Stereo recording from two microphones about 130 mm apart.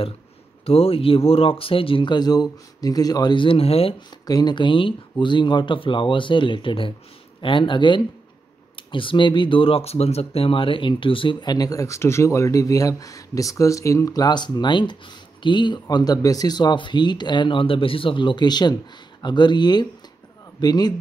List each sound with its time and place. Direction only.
0.7 s speech: 45° left (ahead or behind)
4.3 s speech: 30° left (ahead or behind)